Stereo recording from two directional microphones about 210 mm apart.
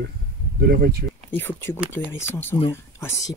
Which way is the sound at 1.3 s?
10° left (ahead or behind).